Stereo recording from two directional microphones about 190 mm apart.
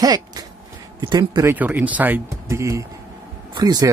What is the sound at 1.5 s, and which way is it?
Speech, 10° right (ahead or behind).